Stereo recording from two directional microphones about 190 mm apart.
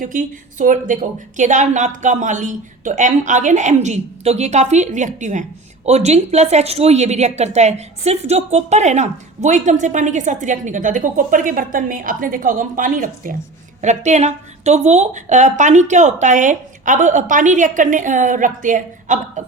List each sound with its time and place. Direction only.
0.0 s a woman's voice: 45° right (ahead or behind)